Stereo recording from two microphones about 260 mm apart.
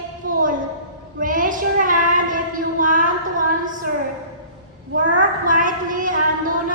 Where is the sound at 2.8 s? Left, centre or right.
Right.